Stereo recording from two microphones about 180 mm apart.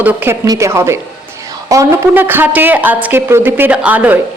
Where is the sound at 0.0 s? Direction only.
10° right (ahead or behind).